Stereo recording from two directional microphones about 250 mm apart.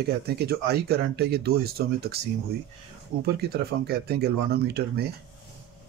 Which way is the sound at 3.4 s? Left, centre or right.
Right.